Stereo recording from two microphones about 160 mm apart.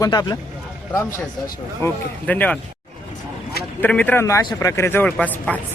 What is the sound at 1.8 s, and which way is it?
Speech, 10° left (ahead or behind).